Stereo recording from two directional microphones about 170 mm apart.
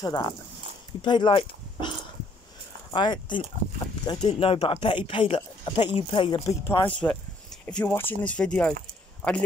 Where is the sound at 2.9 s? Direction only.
25° left (ahead or behind).